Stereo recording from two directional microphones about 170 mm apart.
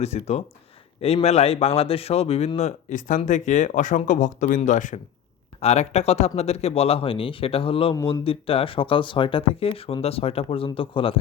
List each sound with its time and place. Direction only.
0.0 s speech: 40° left (ahead or behind)